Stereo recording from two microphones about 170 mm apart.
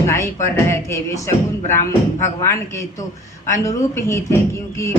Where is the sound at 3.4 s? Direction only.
20° left (ahead or behind).